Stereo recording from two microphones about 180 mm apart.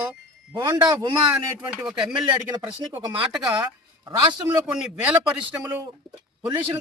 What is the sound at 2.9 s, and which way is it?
Speech, 20° right (ahead or behind).